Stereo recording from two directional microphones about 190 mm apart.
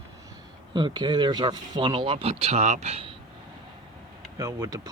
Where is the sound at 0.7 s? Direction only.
25° right (ahead or behind).